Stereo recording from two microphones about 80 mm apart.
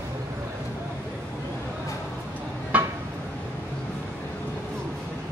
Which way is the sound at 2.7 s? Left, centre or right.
Centre.